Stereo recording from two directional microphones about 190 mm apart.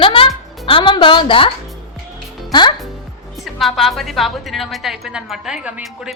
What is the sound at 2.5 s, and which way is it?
Speech, 25° left (ahead or behind).